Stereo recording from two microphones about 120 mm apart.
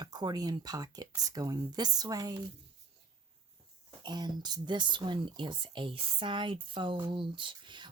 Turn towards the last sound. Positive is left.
turn(degrees=-40)  # may be behind; listen again after turning